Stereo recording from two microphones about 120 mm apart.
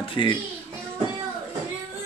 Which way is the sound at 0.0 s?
45° left (ahead or behind).